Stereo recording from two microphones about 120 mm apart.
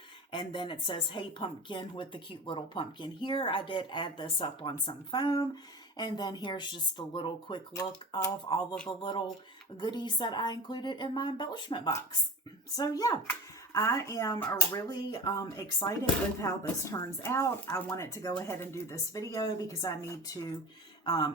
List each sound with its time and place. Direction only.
0.3 s a woman's voice: 45° left (ahead or behind)
7.8 s speech: 30° left (ahead or behind)
9.0 s speech: 40° left (ahead or behind); by 14.6 s 15° left (ahead or behind)
14.7 s speech: 35° left (ahead or behind)
18.4 s speech: 20° left (ahead or behind); by 21.3 s 35° left (ahead or behind)